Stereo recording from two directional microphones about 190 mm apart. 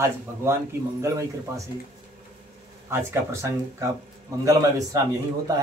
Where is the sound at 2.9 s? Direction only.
15° right (ahead or behind).